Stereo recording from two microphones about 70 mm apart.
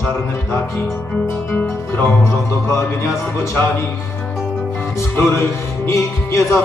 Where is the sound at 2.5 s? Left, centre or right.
Left.